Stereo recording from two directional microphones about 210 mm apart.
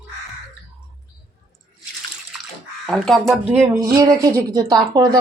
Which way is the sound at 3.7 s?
15° right (ahead or behind).